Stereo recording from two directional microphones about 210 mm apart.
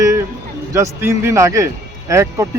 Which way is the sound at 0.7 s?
15° right (ahead or behind).